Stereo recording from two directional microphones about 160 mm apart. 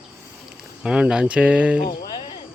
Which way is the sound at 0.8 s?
5° right (ahead or behind).